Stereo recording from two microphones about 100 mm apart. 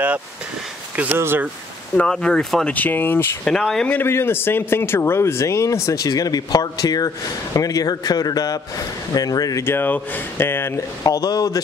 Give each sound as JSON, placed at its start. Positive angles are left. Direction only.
{"t": 1.1, "sound": "speech", "side_deg": -25}
{"t": 2.0, "sound": "speech", "side_deg": 10}
{"t": 3.4, "sound": "speech", "side_deg": 5}
{"t": 4.1, "sound": "a man's voice", "side_deg": 25}
{"t": 9.6, "sound": "speech", "side_deg": 20}
{"t": 11.1, "sound": "a man's voice", "side_deg": 35}